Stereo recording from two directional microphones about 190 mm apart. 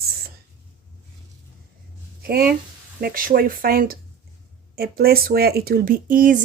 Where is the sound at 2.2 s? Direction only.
50° right (ahead or behind).